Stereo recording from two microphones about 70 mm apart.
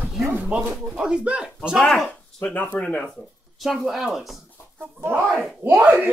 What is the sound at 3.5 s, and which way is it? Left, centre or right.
Speech, centre.